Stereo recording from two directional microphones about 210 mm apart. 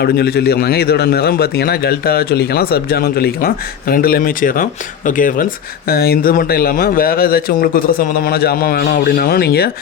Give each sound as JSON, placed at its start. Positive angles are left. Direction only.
{"t": 0.0, "sound": "speech", "side_deg": 50}